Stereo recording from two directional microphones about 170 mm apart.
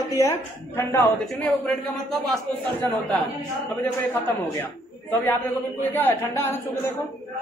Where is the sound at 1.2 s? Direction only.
Centre (ahead or behind).